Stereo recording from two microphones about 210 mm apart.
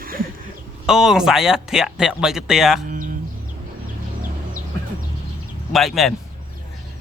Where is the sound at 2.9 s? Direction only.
40° right (ahead or behind).